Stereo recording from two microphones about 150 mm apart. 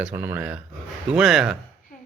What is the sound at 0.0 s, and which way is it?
Speech, 10° right (ahead or behind).